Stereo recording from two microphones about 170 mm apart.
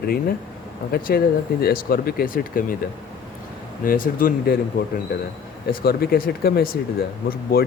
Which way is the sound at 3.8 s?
55° left (ahead or behind).